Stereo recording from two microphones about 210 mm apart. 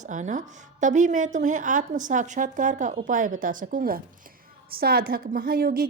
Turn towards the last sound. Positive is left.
turn(degrees=-45)  # may be behind; listen again after turning